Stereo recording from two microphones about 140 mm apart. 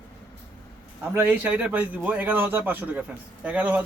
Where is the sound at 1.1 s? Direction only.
10° right (ahead or behind).